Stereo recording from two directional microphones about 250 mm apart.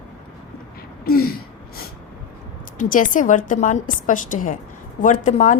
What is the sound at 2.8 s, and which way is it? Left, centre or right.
A woman's voice, left.